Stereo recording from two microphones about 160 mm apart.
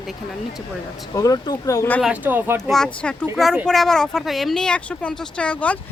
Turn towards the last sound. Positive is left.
turn(degrees=5)  # may be behind; listen again after turning